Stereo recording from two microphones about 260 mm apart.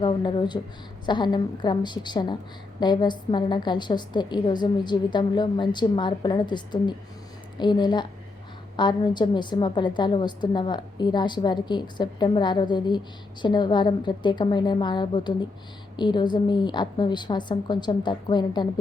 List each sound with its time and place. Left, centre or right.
0.0 s a woman's voice: centre